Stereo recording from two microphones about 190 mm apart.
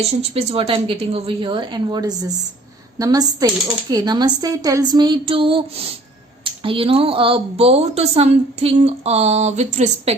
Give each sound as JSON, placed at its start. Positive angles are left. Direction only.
{"t": 0.2, "sound": "a woman's voice", "side_deg": -30}